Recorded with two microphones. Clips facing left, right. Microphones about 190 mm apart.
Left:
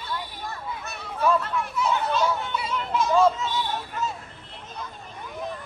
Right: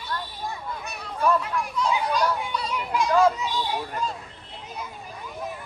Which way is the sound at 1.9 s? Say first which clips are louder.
Even; 10° right (ahead or behind).